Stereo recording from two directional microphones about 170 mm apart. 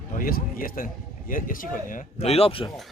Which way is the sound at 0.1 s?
60° left (ahead or behind).